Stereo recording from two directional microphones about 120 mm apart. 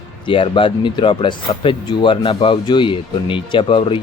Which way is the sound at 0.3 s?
45° left (ahead or behind).